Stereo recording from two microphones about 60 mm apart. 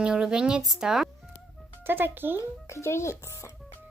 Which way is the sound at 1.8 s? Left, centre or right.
Right.